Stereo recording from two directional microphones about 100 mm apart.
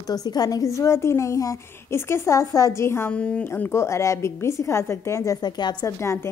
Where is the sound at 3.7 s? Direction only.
30° left (ahead or behind).